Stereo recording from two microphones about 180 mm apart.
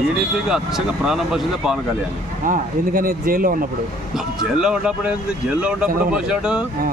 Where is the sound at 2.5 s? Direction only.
50° right (ahead or behind).